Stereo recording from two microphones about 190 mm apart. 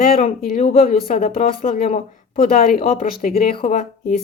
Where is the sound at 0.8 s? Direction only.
50° left (ahead or behind).